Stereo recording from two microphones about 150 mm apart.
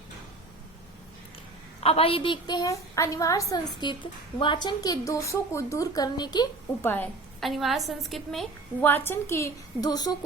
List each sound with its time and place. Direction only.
1.8 s a woman's voice: 40° left (ahead or behind)
6.8 s a woman's voice: 10° left (ahead or behind)
7.4 s a woman's voice: centre (ahead or behind)
8.8 s a woman's voice: 15° left (ahead or behind)